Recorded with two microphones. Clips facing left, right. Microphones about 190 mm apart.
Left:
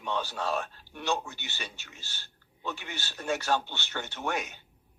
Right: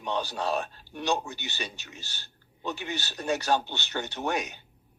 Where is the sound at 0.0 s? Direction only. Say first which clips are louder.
Right 2 dB; 15° right (ahead or behind).